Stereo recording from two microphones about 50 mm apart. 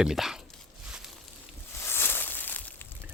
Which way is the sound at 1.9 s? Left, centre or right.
Left.